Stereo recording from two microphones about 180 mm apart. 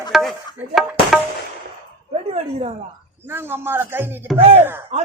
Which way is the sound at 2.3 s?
35° right (ahead or behind).